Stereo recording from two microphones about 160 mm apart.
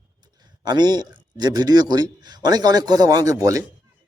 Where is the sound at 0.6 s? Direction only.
25° right (ahead or behind).